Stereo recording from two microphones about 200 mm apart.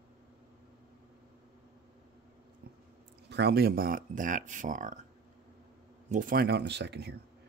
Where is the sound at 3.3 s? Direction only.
55° right (ahead or behind); by 4.9 s 40° right (ahead or behind).